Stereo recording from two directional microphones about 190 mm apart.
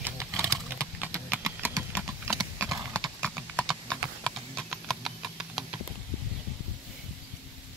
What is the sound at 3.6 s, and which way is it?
Clip-clop, 5° left (ahead or behind).